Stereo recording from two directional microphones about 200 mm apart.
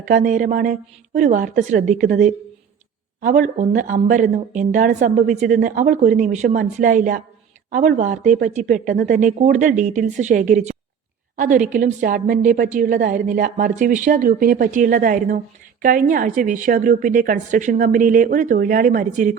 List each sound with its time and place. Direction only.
0.0 s a woman's voice: 40° right (ahead or behind)